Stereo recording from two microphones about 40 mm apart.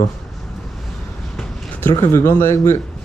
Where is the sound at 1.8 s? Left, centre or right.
Left.